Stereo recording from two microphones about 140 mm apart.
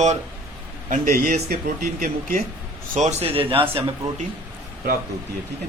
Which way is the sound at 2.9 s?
55° right (ahead or behind).